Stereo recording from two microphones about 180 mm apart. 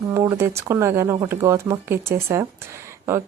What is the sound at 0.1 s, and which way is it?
Speech, 20° right (ahead or behind).